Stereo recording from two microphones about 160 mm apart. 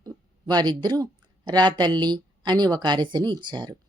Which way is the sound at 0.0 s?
25° right (ahead or behind).